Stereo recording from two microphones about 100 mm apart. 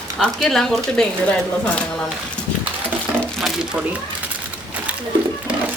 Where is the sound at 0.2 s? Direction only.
5° left (ahead or behind).